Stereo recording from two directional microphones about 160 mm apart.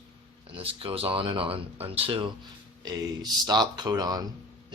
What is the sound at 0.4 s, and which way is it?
Speech, 35° right (ahead or behind).